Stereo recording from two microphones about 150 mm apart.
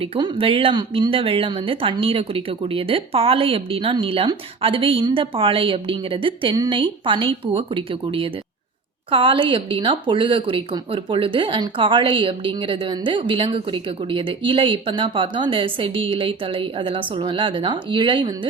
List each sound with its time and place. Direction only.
0.0 s speech: 35° right (ahead or behind)